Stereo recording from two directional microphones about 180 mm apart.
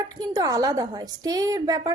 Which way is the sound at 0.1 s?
20° right (ahead or behind).